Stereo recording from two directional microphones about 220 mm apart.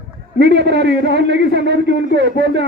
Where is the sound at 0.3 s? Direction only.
50° right (ahead or behind).